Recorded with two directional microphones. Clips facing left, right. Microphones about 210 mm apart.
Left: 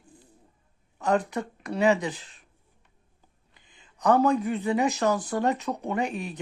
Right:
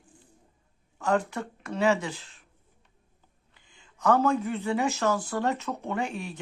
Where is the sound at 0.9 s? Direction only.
20° left (ahead or behind).